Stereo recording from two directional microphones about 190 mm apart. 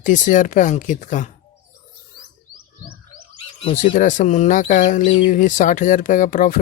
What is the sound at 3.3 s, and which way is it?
Bird, 30° left (ahead or behind).